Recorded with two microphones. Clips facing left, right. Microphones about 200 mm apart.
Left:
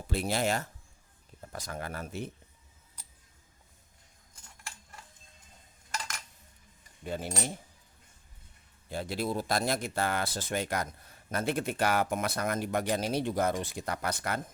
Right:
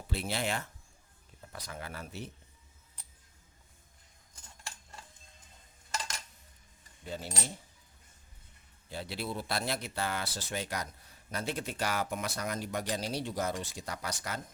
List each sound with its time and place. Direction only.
0.1 s speech: 45° left (ahead or behind)
7.0 s speech: 55° left (ahead or behind)
8.9 s speech: 50° left (ahead or behind)